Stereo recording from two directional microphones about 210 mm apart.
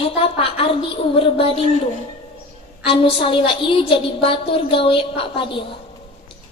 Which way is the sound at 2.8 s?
25° left (ahead or behind).